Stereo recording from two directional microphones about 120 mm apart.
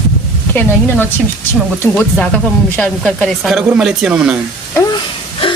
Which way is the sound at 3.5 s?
5° right (ahead or behind).